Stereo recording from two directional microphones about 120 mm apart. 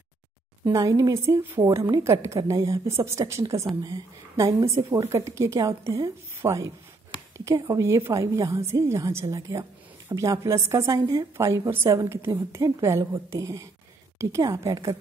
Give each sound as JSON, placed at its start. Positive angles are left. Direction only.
{"t": 0.7, "sound": "a woman's voice", "side_deg": -30}